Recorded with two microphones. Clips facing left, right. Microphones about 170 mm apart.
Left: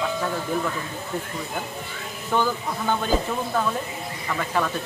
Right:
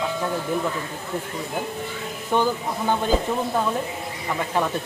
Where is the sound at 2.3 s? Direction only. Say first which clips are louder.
Right 2 dB; 20° right (ahead or behind).